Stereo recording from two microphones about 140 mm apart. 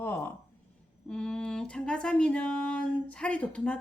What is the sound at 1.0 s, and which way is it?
A woman's voice, 5° left (ahead or behind).